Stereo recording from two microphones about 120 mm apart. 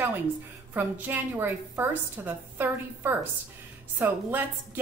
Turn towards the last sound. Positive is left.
turn(degrees=-15)  # may be behind; listen again after turning